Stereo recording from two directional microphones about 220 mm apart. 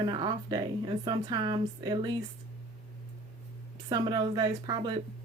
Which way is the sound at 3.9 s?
20° right (ahead or behind).